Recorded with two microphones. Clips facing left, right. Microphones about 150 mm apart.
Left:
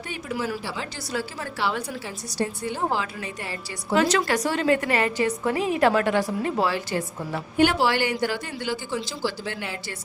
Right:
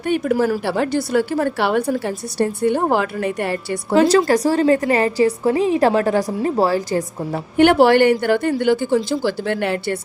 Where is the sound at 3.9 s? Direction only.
30° right (ahead or behind).